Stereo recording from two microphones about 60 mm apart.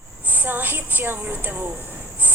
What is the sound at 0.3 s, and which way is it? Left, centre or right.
A woman's voice, right.